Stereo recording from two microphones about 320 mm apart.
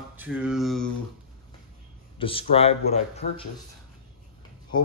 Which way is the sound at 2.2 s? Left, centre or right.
Centre.